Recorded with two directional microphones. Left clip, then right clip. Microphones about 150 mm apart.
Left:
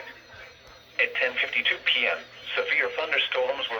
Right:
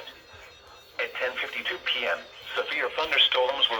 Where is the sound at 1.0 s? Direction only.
50° right (ahead or behind).